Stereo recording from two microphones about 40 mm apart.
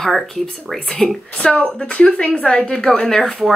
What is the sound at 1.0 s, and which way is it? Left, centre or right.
Speech, centre.